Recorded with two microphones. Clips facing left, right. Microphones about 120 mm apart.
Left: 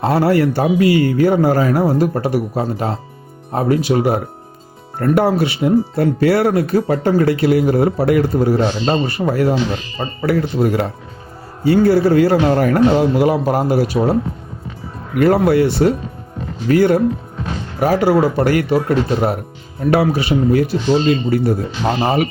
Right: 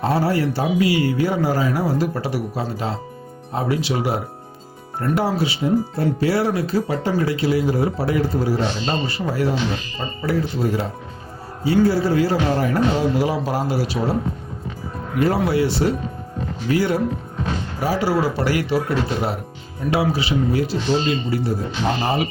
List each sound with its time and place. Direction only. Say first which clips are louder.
0.0 s a man's voice: left 5 dB; 65° left (ahead or behind); by 14.1 s 50° left (ahead or behind)
15.2 s a man's voice: left 6 dB; 55° left (ahead or behind)